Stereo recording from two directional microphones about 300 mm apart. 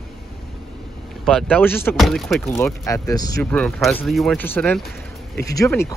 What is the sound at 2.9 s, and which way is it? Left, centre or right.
Speech, centre.